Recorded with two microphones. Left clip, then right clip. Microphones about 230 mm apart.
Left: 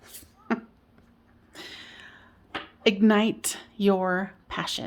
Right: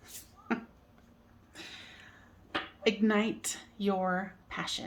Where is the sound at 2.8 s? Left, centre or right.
Left.